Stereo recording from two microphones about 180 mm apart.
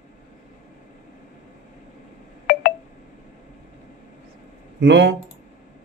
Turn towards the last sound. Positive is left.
turn(degrees=-75)  # may be behind; listen again after turning